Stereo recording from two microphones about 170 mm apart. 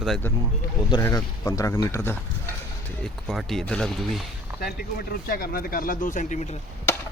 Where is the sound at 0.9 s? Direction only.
20° left (ahead or behind).